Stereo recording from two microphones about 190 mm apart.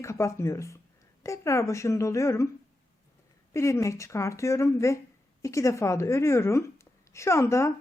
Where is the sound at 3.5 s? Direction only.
15° left (ahead or behind).